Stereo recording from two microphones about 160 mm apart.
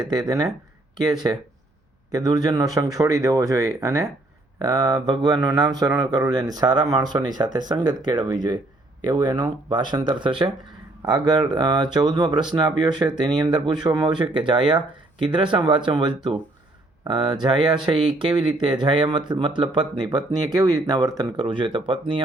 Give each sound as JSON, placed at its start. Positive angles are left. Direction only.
{"t": 0.1, "sound": "speech", "side_deg": -25}